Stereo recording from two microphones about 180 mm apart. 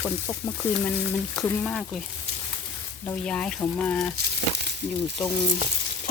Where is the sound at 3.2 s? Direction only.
5° left (ahead or behind).